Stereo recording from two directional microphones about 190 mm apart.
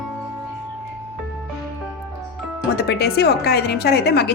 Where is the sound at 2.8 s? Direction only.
60° left (ahead or behind).